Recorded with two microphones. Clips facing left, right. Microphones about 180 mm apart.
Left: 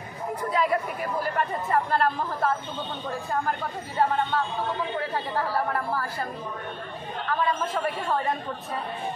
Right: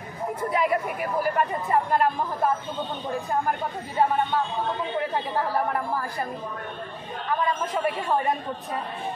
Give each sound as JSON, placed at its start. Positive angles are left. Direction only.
{"t": 0.4, "sound": "a woman's voice", "side_deg": -20}
{"t": 5.1, "sound": "a woman's voice", "side_deg": -15}
{"t": 7.7, "sound": "a woman's voice", "side_deg": -15}